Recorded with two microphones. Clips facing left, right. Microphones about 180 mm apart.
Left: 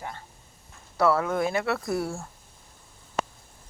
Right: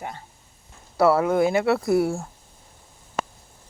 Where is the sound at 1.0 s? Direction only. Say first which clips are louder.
Right 5 dB; 25° right (ahead or behind).